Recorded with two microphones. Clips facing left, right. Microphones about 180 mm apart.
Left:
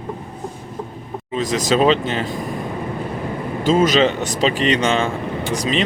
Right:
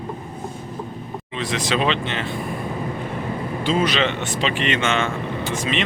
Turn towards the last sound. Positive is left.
turn(degrees=35)  # may be behind; listen again after turning